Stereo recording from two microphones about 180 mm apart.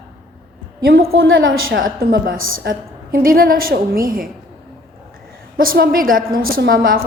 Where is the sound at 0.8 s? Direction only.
60° right (ahead or behind); by 1.8 s 90° right.